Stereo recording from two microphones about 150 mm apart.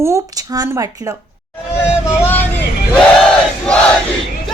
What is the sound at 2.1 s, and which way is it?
Vehicle, 15° left (ahead or behind).